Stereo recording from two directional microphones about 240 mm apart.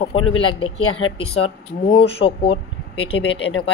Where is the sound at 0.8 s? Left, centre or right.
Left.